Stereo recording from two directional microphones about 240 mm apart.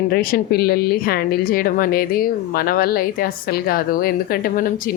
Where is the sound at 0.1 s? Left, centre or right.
Left.